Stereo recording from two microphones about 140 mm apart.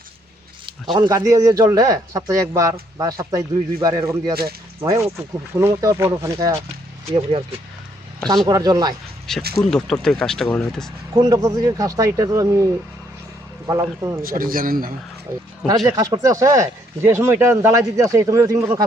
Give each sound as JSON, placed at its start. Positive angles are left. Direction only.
{"t": 0.9, "sound": "speech", "side_deg": -30}
{"t": 7.1, "sound": "speech", "side_deg": -45}
{"t": 8.4, "sound": "speech", "side_deg": -25}
{"t": 9.6, "sound": "speech", "side_deg": 5}
{"t": 11.1, "sound": "speech", "side_deg": -25}
{"t": 13.7, "sound": "speech", "side_deg": -25}
{"t": 14.2, "sound": "a man's voice", "side_deg": -90}
{"t": 15.9, "sound": "speech", "side_deg": -25}